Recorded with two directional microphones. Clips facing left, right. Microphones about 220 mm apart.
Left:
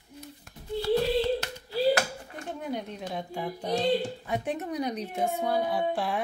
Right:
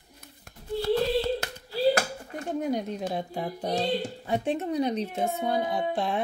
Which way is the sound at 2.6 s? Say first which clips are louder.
Right 5 dB; 35° right (ahead or behind).